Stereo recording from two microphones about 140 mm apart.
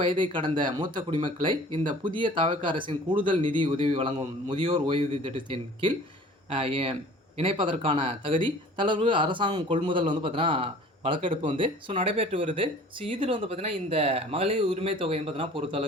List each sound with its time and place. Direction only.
0.0 s speech: 35° right (ahead or behind)